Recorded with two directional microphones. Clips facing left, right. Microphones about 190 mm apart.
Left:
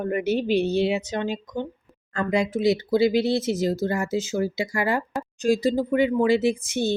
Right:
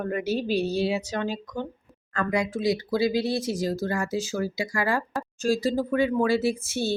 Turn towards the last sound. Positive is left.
turn(degrees=15)  # may be behind; listen again after turning